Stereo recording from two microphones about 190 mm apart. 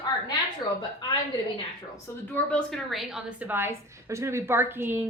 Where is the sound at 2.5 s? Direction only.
Centre (ahead or behind).